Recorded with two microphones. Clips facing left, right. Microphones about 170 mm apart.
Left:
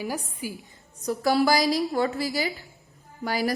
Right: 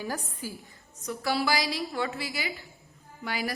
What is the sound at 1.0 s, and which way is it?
A woman's voice, 40° left (ahead or behind).